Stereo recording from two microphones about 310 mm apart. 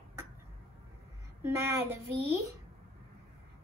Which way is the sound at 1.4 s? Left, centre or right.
Centre.